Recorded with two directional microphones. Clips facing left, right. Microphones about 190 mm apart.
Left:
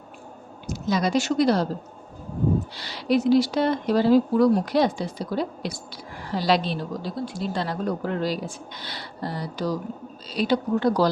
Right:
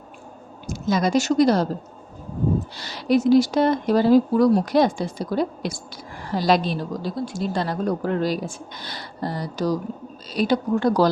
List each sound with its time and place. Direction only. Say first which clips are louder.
0.7 s a woman's voice: right 2 dB; 45° right (ahead or behind)
2.7 s speech: right 2 dB; 45° right (ahead or behind)